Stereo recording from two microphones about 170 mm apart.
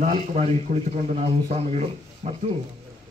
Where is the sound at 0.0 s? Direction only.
40° right (ahead or behind).